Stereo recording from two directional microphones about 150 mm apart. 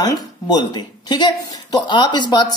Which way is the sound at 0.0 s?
25° left (ahead or behind).